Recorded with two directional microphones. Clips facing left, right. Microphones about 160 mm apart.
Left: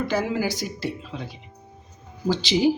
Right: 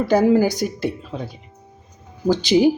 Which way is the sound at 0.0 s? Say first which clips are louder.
Right 9 dB; 40° right (ahead or behind).